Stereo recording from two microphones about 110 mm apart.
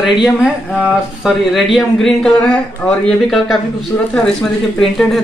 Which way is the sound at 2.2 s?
10° left (ahead or behind).